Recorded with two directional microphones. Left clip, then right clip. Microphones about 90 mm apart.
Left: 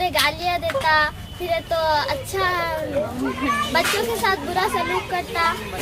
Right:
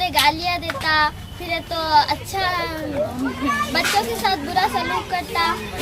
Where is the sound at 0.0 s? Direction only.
30° left (ahead or behind).